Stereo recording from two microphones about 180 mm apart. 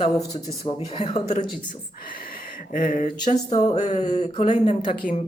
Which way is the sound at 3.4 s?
35° left (ahead or behind).